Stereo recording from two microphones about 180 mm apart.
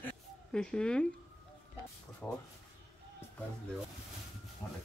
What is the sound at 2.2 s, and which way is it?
Speech, 10° left (ahead or behind).